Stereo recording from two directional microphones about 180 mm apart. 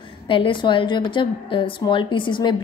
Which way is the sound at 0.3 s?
30° left (ahead or behind).